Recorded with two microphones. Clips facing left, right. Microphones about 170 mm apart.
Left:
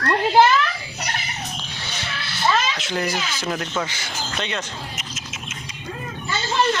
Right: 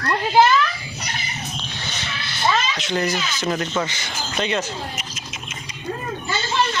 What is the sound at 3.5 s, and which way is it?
Speech, centre (ahead or behind).